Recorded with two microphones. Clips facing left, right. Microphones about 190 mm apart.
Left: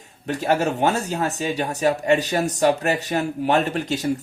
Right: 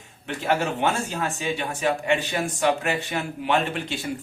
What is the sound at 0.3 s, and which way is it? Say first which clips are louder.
Speech: left 4 dB; 40° left (ahead or behind).